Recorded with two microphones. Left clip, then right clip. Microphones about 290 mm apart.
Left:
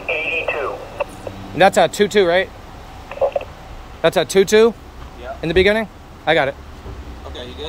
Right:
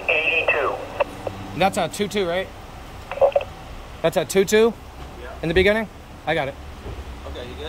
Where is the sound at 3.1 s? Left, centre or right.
Centre.